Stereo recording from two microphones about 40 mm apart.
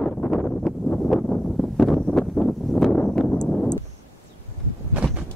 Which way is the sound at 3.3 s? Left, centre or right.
Left.